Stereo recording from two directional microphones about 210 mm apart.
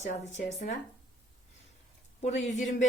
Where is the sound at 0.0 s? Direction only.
35° left (ahead or behind).